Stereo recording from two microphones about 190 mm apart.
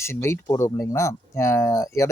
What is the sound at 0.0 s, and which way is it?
Speech, 15° left (ahead or behind).